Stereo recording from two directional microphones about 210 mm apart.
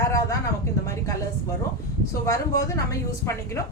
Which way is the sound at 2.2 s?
15° left (ahead or behind).